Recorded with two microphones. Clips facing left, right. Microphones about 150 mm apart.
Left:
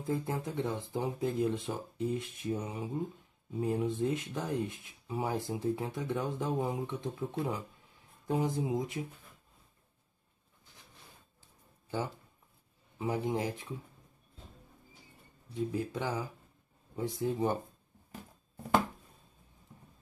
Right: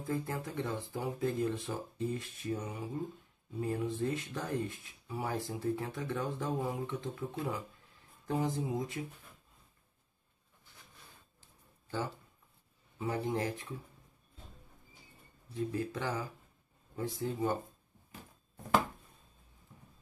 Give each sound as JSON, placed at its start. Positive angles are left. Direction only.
{"t": 0.0, "sound": "speech", "side_deg": 20}
{"t": 13.0, "sound": "speech", "side_deg": 15}
{"t": 15.5, "sound": "speech", "side_deg": 15}